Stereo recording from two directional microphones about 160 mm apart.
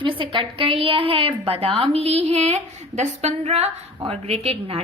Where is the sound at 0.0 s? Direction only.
35° right (ahead or behind).